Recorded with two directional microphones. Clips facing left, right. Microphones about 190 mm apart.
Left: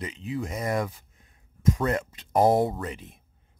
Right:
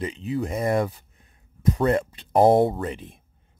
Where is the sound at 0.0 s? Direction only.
30° right (ahead or behind).